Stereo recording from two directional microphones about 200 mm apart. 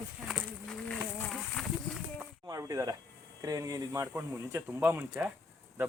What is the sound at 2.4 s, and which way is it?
Speech, 15° right (ahead or behind).